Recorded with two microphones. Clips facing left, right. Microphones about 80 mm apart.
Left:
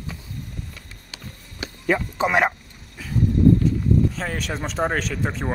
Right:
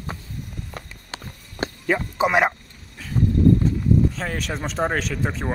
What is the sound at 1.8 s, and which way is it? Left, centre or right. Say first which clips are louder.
Speech: even; centre.